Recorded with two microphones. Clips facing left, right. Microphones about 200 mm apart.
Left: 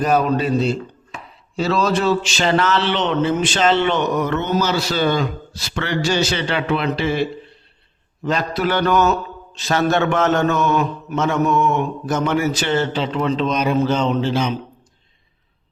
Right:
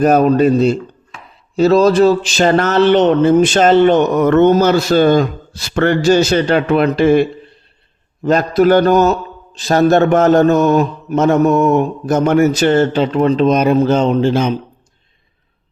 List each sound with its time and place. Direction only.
0.0 s a man's voice: 45° right (ahead or behind)